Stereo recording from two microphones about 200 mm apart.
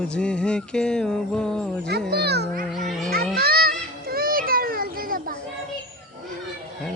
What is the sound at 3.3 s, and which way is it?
Children playing, 50° right (ahead or behind).